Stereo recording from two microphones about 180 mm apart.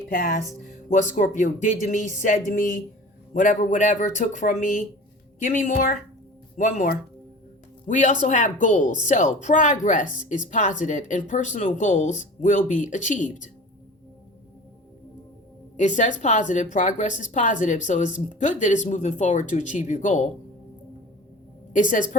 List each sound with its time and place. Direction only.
0.1 s speech: 50° left (ahead or behind)
15.8 s speech: 45° left (ahead or behind)
21.7 s a woman's voice: 45° left (ahead or behind)